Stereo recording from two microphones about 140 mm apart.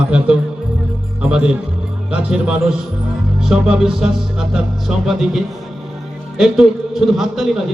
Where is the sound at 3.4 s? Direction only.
5° right (ahead or behind).